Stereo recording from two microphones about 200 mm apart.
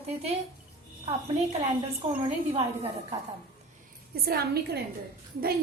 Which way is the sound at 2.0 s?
30° right (ahead or behind).